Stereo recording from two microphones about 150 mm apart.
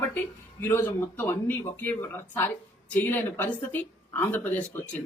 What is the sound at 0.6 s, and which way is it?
Speech, 15° left (ahead or behind).